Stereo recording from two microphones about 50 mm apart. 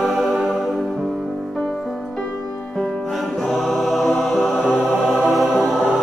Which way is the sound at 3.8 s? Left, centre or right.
Centre.